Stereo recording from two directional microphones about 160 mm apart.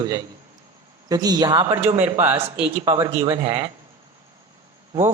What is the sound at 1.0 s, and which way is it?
Speech, 25° right (ahead or behind).